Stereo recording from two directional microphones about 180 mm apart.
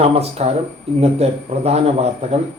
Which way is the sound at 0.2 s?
35° right (ahead or behind).